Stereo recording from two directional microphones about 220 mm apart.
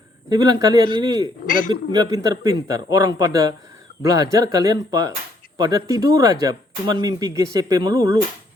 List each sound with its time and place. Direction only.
0.3 s a man's voice: 20° right (ahead or behind)
1.5 s a man's voice: 40° left (ahead or behind)
1.9 s speech: 15° right (ahead or behind)